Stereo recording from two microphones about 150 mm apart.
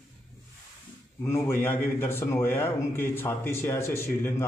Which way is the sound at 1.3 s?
15° left (ahead or behind).